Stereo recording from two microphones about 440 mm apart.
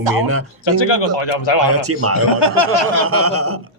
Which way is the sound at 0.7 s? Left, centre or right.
Left.